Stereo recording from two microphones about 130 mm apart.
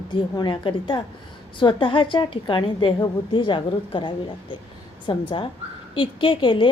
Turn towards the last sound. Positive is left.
turn(degrees=40)  # may be behind; listen again after turning